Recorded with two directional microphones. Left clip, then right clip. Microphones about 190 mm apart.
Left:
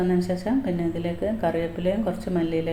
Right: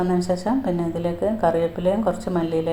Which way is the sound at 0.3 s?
45° right (ahead or behind).